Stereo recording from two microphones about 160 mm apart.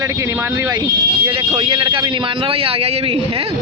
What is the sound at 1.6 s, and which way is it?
A man's voice, 30° right (ahead or behind).